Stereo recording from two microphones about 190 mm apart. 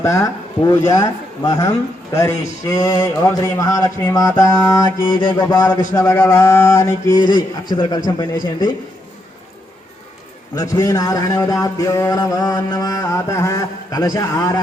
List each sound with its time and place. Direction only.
0.0 s a man's voice: 15° left (ahead or behind)
1.5 s music: 20° left (ahead or behind)
2.1 s a man's voice: 15° left (ahead or behind)
5.3 s music: 20° left (ahead or behind)
5.9 s a man's voice: 15° left (ahead or behind)
10.5 s a man's voice: 15° left (ahead or behind)